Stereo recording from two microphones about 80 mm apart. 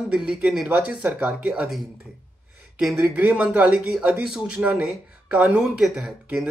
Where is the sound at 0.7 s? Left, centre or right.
Centre.